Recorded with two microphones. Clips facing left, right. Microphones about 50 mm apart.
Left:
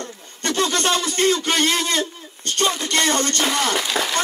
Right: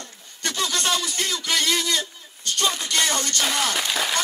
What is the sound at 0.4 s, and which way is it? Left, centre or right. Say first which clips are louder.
A man's voice: left 5 dB; left.